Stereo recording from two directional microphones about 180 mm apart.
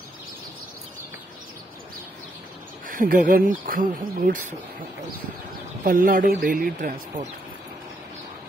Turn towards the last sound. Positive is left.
turn(degrees=-50)  # may be behind; listen again after turning